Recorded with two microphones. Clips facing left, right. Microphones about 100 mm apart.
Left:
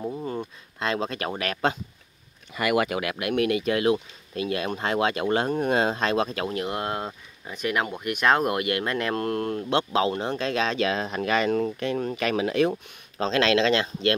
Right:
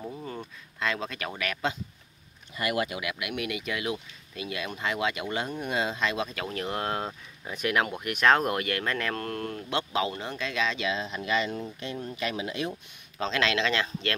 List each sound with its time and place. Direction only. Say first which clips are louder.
0.0 s a sound: left 7 dB; 20° left (ahead or behind)
0.7 s speech: left 4 dB; 30° left (ahead or behind)
2.5 s speech: left 6 dB; 80° left
3.0 s speech: left 8 dB; 45° left (ahead or behind)
6.4 s speech: left 5 dB; 20° left (ahead or behind)
6.7 s speech: left 1 dB; 5° left (ahead or behind); by 12.7 s 65° left (ahead or behind)
13.2 s speech: left 6 dB; 35° left (ahead or behind)